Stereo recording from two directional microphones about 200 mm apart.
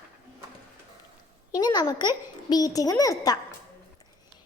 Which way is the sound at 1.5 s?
20° left (ahead or behind).